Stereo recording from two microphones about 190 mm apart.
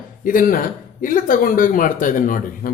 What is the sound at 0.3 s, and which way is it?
Speech, 45° left (ahead or behind).